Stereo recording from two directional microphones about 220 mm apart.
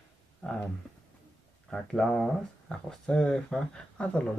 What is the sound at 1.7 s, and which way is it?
Speech, 5° left (ahead or behind).